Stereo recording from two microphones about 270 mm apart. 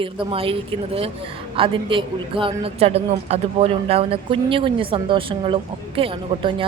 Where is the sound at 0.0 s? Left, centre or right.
Centre.